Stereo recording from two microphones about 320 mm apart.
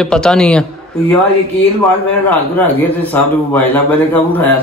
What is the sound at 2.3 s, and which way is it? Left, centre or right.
Speech, centre.